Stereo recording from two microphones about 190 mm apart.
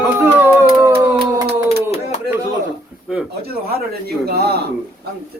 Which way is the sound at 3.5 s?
55° right (ahead or behind).